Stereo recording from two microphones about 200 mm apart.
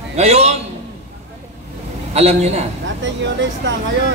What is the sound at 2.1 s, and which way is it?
Speech, 30° right (ahead or behind).